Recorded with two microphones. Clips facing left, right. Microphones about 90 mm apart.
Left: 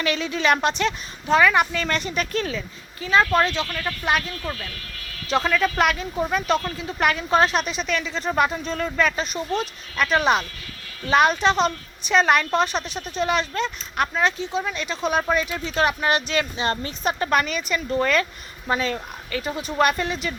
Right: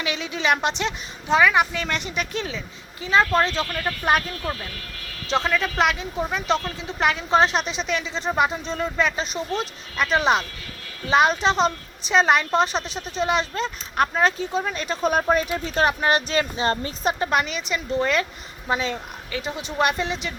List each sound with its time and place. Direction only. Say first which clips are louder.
0.0 s a woman's voice: left 3 dB; 15° right (ahead or behind)
3.4 s speech: even; 35° right (ahead or behind)
3.7 s speech: right 1 dB; 25° right (ahead or behind)
4.0 s speech: right 2 dB; 40° right (ahead or behind)
5.3 s speech: left 2 dB; 25° right (ahead or behind)
17.2 s speech: left 1 dB; 15° right (ahead or behind)